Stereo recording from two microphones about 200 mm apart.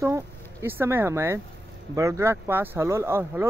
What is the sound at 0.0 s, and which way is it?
Speech, 15° right (ahead or behind).